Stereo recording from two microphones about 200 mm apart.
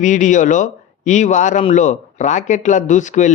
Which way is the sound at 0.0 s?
40° left (ahead or behind).